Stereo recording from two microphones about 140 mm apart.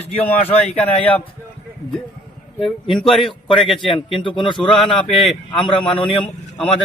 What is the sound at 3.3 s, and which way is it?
Speech, 35° left (ahead or behind).